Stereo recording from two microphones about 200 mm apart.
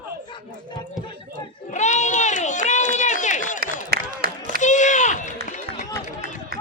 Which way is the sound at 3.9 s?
50° right (ahead or behind).